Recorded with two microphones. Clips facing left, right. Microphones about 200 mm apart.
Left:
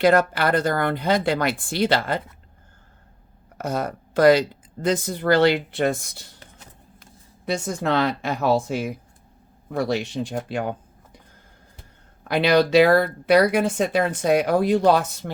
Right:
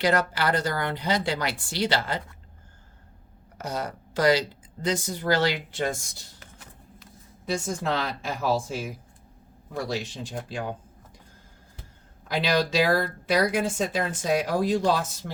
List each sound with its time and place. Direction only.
0.0 s speech: 55° left (ahead or behind)
3.6 s speech: 55° left (ahead or behind)
10.5 s a sound: 60° left (ahead or behind)
12.3 s speech: 60° left (ahead or behind)